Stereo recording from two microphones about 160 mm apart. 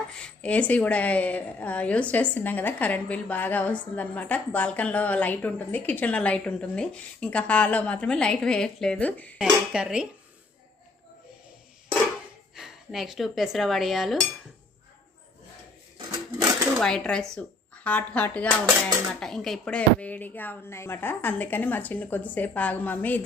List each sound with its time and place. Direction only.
0.2 s a woman's voice: 5° left (ahead or behind)
9.4 s speech: 5° right (ahead or behind)
12.5 s cutlery: centre (ahead or behind)
16.7 s a woman's voice: 5° left (ahead or behind)